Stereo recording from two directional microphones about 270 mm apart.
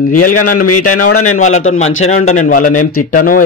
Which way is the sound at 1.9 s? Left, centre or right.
Left.